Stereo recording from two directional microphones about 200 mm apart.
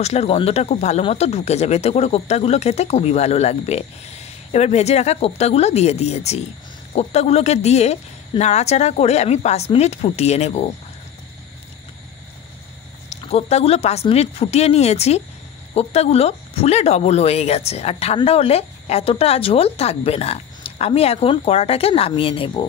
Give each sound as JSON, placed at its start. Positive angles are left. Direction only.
{"t": 0.0, "sound": "speech", "side_deg": 30}
{"t": 13.1, "sound": "speech", "side_deg": 30}